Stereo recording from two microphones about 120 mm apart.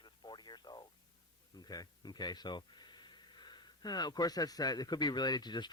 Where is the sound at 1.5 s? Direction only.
35° left (ahead or behind).